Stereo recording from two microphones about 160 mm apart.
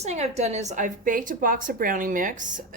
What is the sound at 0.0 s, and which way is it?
A woman's voice, 45° right (ahead or behind).